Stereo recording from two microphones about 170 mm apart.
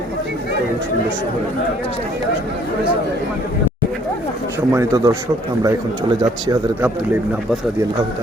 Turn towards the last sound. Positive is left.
turn(degrees=-20)  # may be behind; listen again after turning